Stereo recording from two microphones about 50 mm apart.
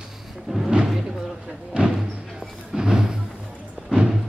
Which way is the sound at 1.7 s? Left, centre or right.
Centre.